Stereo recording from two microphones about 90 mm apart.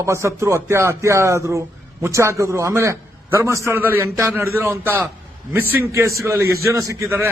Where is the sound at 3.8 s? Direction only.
25° right (ahead or behind).